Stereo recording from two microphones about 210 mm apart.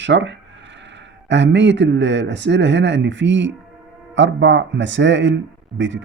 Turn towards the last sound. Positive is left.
turn(degrees=-60)  # may be behind; listen again after turning